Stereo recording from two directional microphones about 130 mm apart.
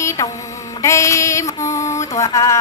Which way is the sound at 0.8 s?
25° left (ahead or behind).